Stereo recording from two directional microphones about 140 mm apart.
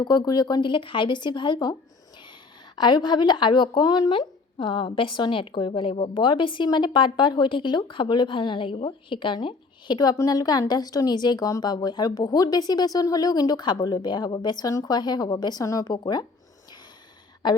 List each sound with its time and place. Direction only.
0.0 s speech: 30° left (ahead or behind)
2.7 s speech: 30° left (ahead or behind)